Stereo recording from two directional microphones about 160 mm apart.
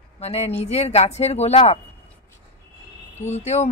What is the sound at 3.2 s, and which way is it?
Speech, 45° left (ahead or behind).